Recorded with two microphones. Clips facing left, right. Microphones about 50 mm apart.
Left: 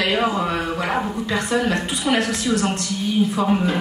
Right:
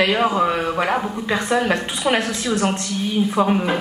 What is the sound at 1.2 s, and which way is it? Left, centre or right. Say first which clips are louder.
A woman's voice: right 4 dB; right.